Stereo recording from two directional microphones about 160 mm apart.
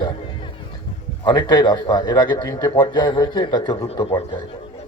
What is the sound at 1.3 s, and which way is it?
A man's voice, 25° left (ahead or behind).